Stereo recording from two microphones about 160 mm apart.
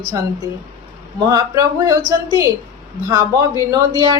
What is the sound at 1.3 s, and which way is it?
Speech, 20° right (ahead or behind).